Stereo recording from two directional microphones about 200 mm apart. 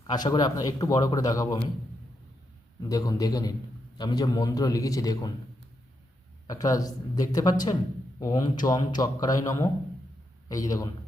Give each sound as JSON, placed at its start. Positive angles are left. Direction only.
{"t": 0.1, "sound": "speech", "side_deg": 20}
{"t": 2.9, "sound": "speech", "side_deg": 20}
{"t": 6.5, "sound": "speech", "side_deg": 15}